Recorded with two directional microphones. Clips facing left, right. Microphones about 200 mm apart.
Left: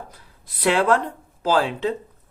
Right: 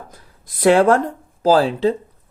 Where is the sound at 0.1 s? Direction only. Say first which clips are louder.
Right 3 dB; 45° right (ahead or behind).